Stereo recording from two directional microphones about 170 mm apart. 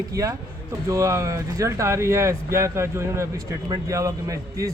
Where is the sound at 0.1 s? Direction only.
20° right (ahead or behind).